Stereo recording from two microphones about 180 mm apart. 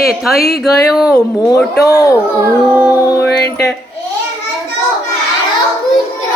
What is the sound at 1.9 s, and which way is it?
Speech, 20° left (ahead or behind).